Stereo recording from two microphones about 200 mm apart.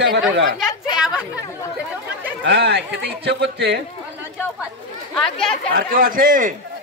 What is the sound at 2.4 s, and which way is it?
Speech, 55° right (ahead or behind).